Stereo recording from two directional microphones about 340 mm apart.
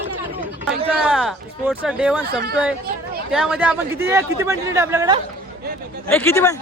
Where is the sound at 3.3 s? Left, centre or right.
Centre.